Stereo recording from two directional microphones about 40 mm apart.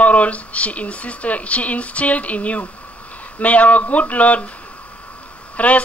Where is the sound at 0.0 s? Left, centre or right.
Left.